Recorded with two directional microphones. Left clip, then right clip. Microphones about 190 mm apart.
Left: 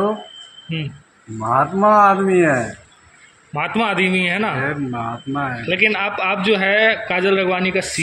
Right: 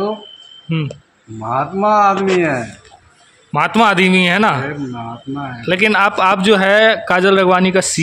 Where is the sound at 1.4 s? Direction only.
Centre (ahead or behind).